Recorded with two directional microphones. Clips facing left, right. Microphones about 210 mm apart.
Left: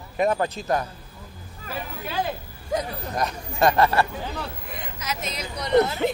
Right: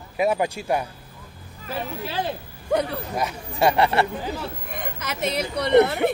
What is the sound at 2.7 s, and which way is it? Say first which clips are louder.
Speech: right 5 dB; 65° right (ahead or behind).